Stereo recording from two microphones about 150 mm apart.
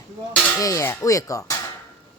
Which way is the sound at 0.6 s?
20° left (ahead or behind).